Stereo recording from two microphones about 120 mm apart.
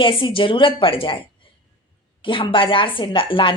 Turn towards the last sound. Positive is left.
turn(degrees=45)  # may be behind; listen again after turning